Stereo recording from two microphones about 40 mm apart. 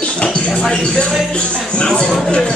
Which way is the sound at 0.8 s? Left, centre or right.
Left.